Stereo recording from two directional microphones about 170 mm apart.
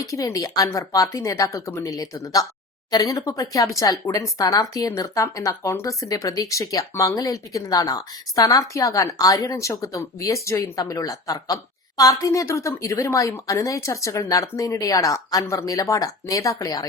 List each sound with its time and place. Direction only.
0.0 s speech: 20° left (ahead or behind)